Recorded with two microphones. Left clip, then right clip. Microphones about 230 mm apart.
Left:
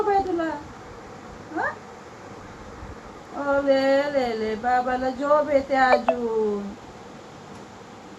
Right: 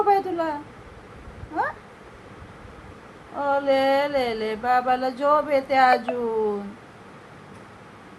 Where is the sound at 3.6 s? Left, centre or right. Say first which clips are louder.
Even; right.